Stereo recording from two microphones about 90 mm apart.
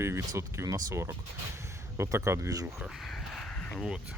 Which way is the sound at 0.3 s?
35° right (ahead or behind).